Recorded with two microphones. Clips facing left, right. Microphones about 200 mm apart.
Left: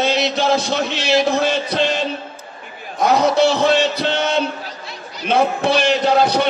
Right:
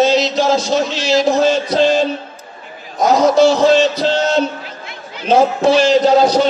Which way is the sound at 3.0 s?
60° left (ahead or behind).